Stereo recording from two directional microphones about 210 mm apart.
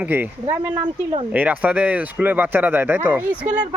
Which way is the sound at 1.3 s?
5° right (ahead or behind).